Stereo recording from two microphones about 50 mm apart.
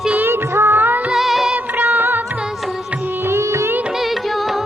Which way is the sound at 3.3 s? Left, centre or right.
Right.